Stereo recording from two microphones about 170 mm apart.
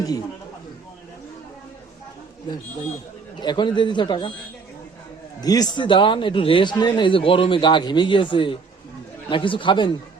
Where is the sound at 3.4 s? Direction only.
25° left (ahead or behind).